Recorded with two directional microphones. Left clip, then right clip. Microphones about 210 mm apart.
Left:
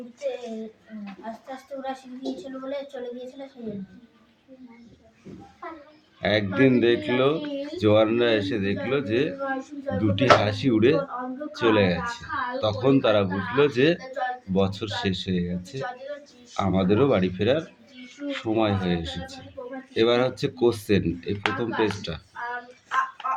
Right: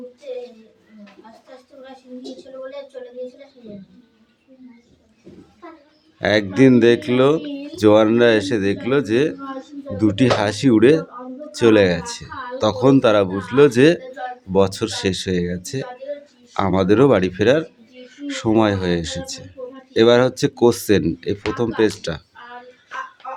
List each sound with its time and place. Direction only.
6.1 s speech: 40° right (ahead or behind)